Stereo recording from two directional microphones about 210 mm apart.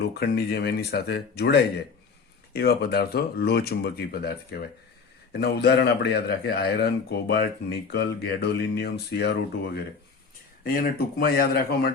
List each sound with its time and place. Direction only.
0.0 s speech: 50° left (ahead or behind)